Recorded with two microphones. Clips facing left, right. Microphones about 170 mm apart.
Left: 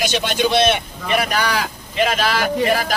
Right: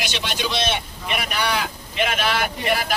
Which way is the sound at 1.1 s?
40° left (ahead or behind).